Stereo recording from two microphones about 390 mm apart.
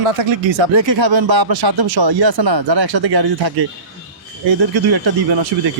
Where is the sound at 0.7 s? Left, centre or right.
Right.